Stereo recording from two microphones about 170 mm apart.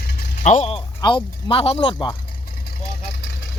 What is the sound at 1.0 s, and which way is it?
Speech, 30° left (ahead or behind).